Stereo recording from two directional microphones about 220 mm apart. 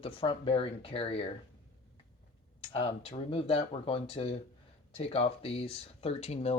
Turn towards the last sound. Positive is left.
turn(degrees=30)  # may be behind; listen again after turning